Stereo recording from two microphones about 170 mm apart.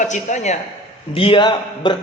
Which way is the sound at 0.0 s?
45° left (ahead or behind).